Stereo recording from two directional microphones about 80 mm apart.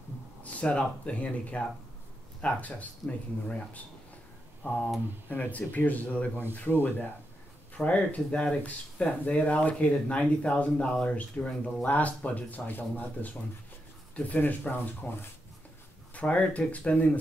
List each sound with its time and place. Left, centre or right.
0.4 s speech: centre
5.3 s speech: left
16.2 s speech: centre